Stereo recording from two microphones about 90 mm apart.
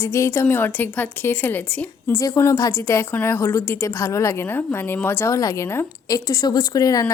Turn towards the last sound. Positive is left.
turn(degrees=45)  # may be behind; listen again after turning